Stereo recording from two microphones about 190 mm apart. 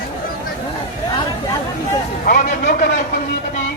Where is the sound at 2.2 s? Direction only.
50° left (ahead or behind).